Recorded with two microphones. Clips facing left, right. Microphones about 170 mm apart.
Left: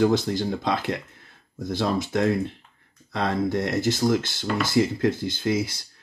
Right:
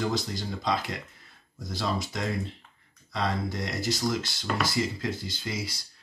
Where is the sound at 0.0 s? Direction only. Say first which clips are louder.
Left 9 dB; 55° left (ahead or behind).